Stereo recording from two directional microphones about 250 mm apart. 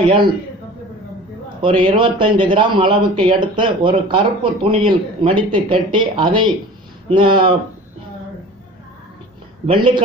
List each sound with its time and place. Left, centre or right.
0.0 s speech: centre
1.6 s speech: right
9.7 s speech: centre